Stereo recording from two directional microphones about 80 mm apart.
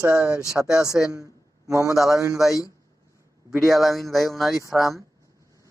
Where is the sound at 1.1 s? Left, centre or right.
Right.